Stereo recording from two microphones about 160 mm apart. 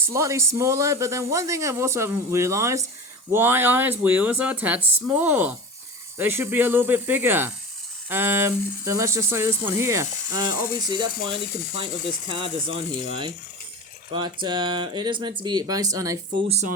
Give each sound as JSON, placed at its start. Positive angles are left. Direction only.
{"t": 0.1, "sound": "a man's voice", "side_deg": -20}
{"t": 14.4, "sound": "a man's voice", "side_deg": -30}
{"t": 16.5, "sound": "speech", "side_deg": -45}